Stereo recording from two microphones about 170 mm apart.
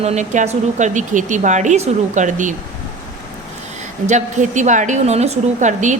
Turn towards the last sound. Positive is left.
turn(degrees=-45)  # may be behind; listen again after turning